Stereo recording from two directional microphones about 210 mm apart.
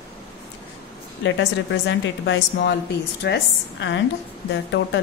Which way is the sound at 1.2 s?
60° left (ahead or behind).